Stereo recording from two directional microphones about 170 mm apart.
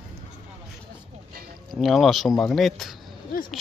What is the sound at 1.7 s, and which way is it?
Speech, centre (ahead or behind).